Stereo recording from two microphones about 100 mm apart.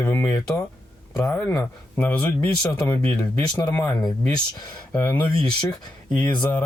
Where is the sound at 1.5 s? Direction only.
30° left (ahead or behind).